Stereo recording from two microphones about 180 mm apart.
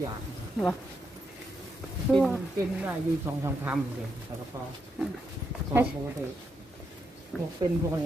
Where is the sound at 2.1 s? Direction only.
5° left (ahead or behind).